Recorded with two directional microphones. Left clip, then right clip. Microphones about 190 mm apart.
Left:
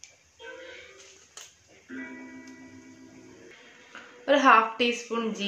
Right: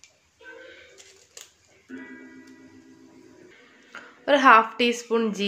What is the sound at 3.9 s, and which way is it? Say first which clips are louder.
Speech: right 2 dB; 55° right (ahead or behind).